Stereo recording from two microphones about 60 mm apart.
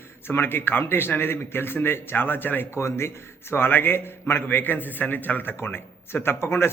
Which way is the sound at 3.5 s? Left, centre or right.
Left.